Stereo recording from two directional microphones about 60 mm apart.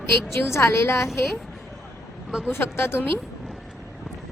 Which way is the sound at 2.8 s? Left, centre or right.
Left.